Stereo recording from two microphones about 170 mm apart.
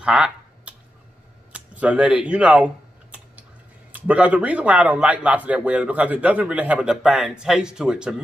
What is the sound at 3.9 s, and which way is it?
A man's voice, 10° right (ahead or behind).